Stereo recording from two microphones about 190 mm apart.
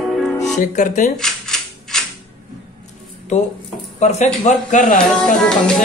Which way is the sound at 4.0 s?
35° left (ahead or behind).